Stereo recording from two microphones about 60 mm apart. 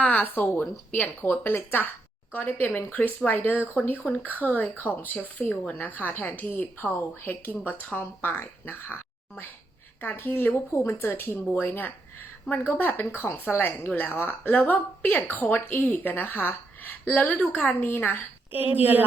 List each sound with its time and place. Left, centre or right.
0.0 s a woman's voice: left
10.0 s a woman's voice: left
10.7 s speech: left
11.0 s a woman's voice: left
18.5 s speech: right